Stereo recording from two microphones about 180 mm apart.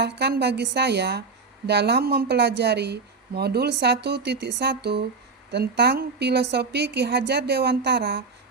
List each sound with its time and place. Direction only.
0.0 s speech: 65° right (ahead or behind)